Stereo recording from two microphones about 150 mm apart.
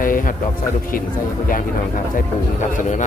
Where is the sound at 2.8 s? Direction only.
55° left (ahead or behind).